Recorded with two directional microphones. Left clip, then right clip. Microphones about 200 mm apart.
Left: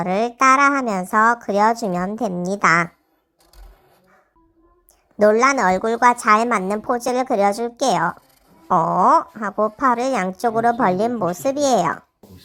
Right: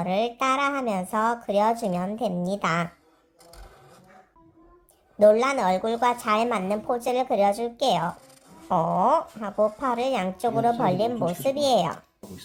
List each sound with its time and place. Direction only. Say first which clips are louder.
0.0 s a woman's voice: left 8 dB; 20° left (ahead or behind)
5.1 s a woman's voice: left 4 dB; 20° left (ahead or behind)